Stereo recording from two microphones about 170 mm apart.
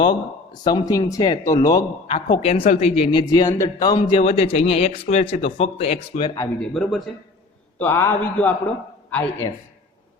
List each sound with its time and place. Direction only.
0.0 s speech: 25° left (ahead or behind)
2.0 s a woman's voice: 35° left (ahead or behind)
6.6 s speech: centre (ahead or behind)
7.8 s a man's voice: 15° left (ahead or behind)